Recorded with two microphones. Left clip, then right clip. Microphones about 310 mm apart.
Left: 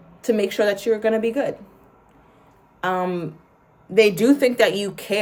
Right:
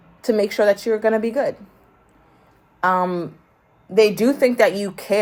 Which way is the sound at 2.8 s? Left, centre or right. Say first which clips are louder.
Right 4 dB; centre.